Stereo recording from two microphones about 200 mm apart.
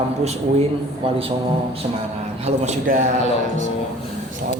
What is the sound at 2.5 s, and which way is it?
Speech, 35° right (ahead or behind).